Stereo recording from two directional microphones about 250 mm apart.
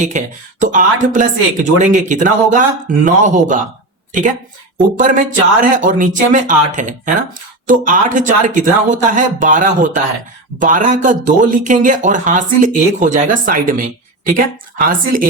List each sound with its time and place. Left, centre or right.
0.0 s speech: right
4.9 s speech: right